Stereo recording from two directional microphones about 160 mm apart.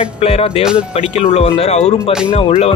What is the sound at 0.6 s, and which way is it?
Speech, 5° right (ahead or behind).